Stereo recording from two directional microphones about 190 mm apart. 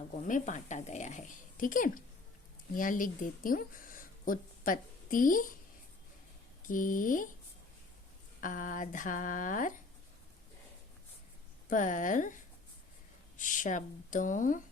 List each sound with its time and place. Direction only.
0.2 s a woman's voice: 40° left (ahead or behind)
6.6 s speech: 45° left (ahead or behind)
8.4 s speech: 45° left (ahead or behind)
11.7 s speech: 45° left (ahead or behind)